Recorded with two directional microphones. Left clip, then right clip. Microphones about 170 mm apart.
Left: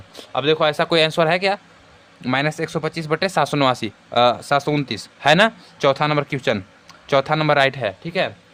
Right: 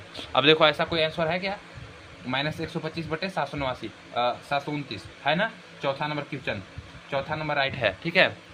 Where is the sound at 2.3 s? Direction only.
45° left (ahead or behind).